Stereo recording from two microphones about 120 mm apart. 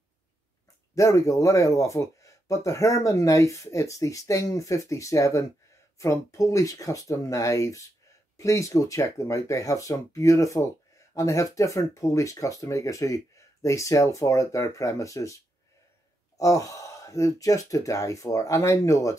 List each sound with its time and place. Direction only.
0.9 s speech: 25° left (ahead or behind)
16.3 s speech: 25° left (ahead or behind)